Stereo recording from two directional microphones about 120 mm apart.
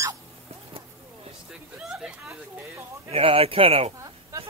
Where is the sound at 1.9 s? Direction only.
5° right (ahead or behind).